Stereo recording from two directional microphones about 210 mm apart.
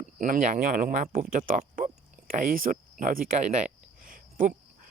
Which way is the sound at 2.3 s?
40° right (ahead or behind).